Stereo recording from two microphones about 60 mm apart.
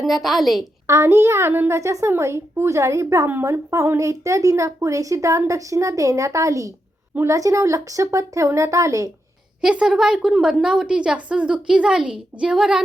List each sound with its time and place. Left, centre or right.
0.0 s a woman's voice: centre
0.9 s a woman's voice: right
9.6 s a woman's voice: centre